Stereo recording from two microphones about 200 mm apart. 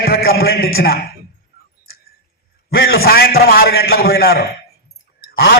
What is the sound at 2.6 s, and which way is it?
A man's voice, 50° left (ahead or behind).